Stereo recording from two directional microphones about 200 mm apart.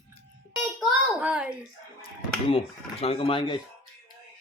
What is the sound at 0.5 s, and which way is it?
A child's voice, centre (ahead or behind).